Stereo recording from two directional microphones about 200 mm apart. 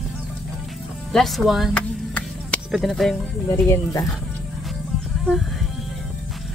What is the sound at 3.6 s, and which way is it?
Speech, 15° left (ahead or behind).